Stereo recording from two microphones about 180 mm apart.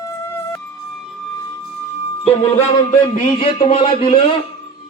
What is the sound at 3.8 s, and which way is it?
Speech, 30° left (ahead or behind).